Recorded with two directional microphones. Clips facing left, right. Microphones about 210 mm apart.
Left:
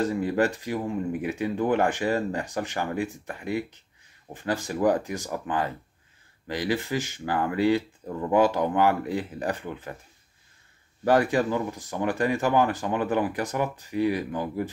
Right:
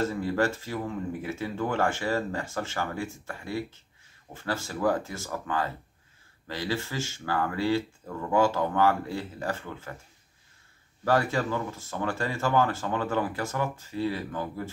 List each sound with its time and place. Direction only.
0.0 s speech: 15° left (ahead or behind)
11.1 s speech: 15° left (ahead or behind)